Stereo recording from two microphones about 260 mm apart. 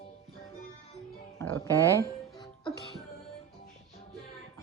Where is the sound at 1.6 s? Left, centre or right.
Centre.